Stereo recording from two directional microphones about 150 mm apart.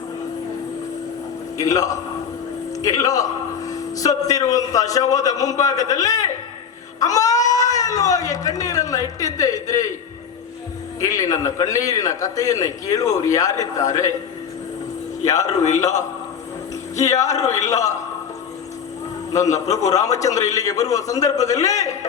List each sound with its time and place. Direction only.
1.5 s a man's voice: 25° left (ahead or behind)
11.0 s a man's voice: 20° left (ahead or behind)
15.2 s a man's voice: 25° left (ahead or behind)
17.0 s a man's voice: 20° left (ahead or behind)
19.9 s a man's voice: 20° left (ahead or behind)